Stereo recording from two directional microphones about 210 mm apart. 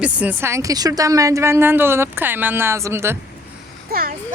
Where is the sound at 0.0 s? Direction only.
5° right (ahead or behind).